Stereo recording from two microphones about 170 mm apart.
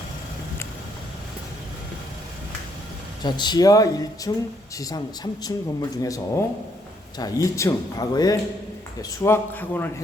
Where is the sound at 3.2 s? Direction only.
25° left (ahead or behind).